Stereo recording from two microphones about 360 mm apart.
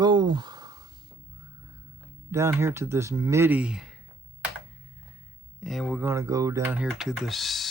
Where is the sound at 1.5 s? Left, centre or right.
Centre.